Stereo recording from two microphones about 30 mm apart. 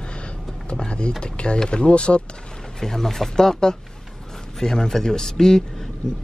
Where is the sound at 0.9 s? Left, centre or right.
Left.